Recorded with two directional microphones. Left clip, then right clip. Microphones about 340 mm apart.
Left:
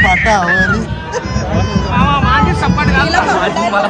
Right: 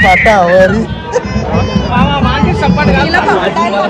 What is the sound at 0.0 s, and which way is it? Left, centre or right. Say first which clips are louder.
Speech: right 4 dB; centre.